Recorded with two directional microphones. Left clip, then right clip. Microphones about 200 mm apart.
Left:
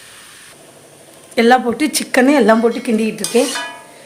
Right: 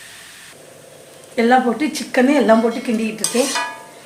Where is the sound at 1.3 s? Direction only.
55° left (ahead or behind).